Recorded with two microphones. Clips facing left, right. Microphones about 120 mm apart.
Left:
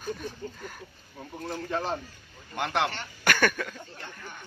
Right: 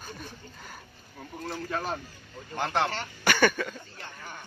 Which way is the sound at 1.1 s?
15° left (ahead or behind).